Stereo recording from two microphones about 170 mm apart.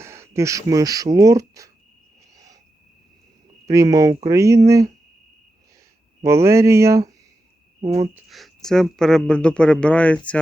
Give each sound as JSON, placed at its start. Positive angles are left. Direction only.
{"t": 0.0, "sound": "speech", "side_deg": -15}
{"t": 2.3, "sound": "cricket", "side_deg": -20}
{"t": 3.7, "sound": "speech", "side_deg": -20}
{"t": 6.2, "sound": "speech", "side_deg": -15}
{"t": 8.1, "sound": "speech", "side_deg": 0}